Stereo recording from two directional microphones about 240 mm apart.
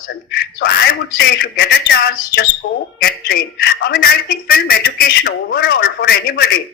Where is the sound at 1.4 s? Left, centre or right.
Left.